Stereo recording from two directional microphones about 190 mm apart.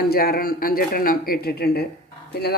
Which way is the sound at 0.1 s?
50° left (ahead or behind).